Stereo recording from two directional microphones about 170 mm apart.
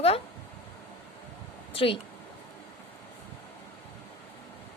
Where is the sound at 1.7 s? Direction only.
30° left (ahead or behind).